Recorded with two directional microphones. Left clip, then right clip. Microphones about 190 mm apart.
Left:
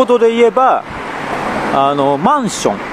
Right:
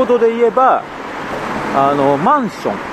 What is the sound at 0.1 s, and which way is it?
Speech, 25° left (ahead or behind).